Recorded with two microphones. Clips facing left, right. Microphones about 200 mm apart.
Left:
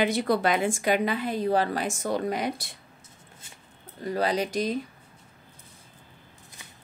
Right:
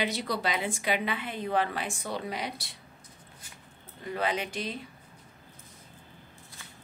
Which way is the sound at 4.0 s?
40° left (ahead or behind).